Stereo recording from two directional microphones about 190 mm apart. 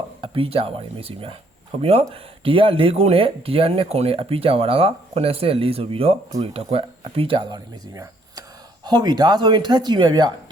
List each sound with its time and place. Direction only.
0.2 s speech: 30° right (ahead or behind)